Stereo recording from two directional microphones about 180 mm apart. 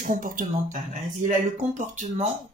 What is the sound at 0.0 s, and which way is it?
Speech, 50° right (ahead or behind).